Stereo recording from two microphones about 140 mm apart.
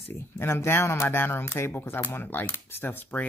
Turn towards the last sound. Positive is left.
turn(degrees=15)  # may be behind; listen again after turning